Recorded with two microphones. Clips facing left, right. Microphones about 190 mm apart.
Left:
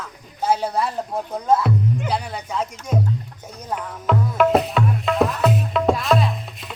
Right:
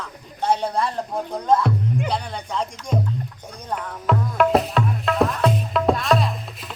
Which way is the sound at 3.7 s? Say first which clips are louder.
Even; centre (ahead or behind).